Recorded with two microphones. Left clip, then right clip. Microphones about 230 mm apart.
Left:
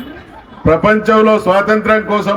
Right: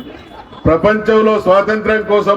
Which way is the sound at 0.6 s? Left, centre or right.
Left.